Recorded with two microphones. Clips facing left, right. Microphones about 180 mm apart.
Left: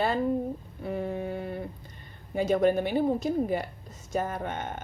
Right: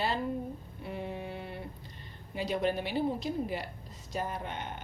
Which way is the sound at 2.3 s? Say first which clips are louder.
Left 8 dB; 50° left (ahead or behind).